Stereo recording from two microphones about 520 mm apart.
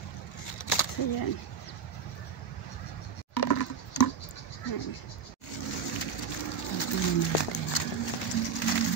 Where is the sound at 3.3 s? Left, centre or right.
Left.